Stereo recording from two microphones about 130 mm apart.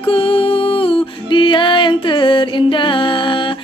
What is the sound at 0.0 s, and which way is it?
Music, 45° left (ahead or behind).